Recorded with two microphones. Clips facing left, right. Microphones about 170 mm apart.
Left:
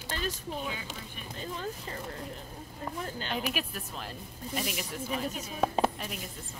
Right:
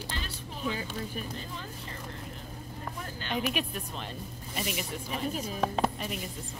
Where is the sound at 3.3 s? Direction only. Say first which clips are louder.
Right 5 dB; 5° left (ahead or behind).